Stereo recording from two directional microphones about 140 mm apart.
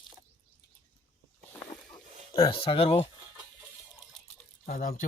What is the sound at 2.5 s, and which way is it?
Speech, 40° left (ahead or behind).